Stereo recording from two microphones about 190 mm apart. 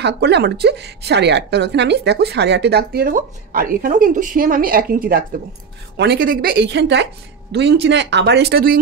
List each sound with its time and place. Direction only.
0.0 s a woman's voice: 60° right (ahead or behind)